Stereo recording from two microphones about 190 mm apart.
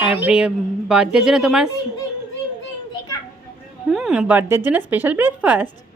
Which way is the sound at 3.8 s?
5° right (ahead or behind).